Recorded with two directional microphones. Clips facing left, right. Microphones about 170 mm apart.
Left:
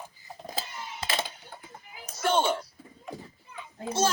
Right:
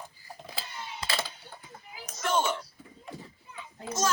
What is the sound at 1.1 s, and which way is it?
Coin, 20° left (ahead or behind).